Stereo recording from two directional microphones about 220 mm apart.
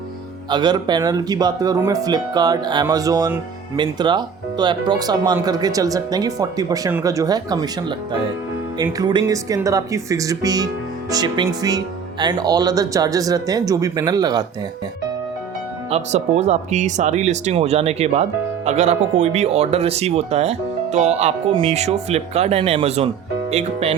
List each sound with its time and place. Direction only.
0.5 s speech: 20° right (ahead or behind)
15.9 s speech: 30° right (ahead or behind)